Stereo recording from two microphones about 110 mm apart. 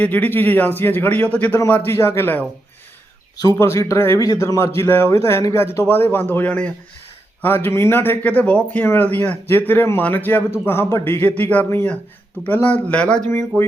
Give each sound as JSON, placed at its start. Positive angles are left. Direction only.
{"t": 0.0, "sound": "speech", "side_deg": 15}
{"t": 3.4, "sound": "a man's voice", "side_deg": 30}